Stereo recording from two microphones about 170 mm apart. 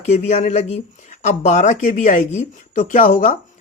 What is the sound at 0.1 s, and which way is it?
Speech, 40° left (ahead or behind).